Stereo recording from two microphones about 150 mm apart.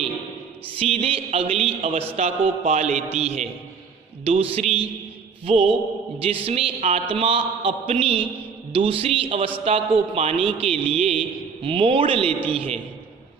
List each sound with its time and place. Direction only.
0.8 s a man's voice: 40° right (ahead or behind)